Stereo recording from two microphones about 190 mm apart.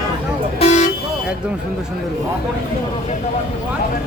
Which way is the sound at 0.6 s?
35° left (ahead or behind).